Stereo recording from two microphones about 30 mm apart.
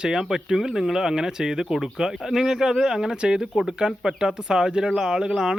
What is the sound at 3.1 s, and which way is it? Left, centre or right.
Speech, right.